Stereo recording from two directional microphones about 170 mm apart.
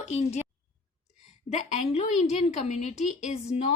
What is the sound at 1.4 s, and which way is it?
Speech, 40° left (ahead or behind).